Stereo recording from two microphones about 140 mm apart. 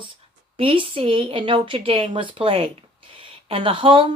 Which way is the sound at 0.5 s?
40° right (ahead or behind).